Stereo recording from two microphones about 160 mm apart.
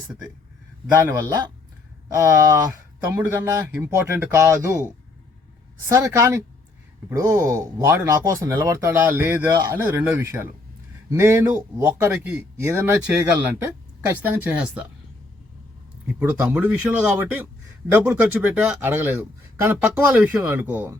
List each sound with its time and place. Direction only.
1.2 s speech: 25° right (ahead or behind)
5.9 s speech: 20° right (ahead or behind)
16.0 s speech: 10° right (ahead or behind)